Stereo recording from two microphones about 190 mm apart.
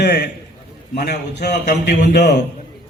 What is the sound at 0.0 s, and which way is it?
A man's voice, 60° left (ahead or behind).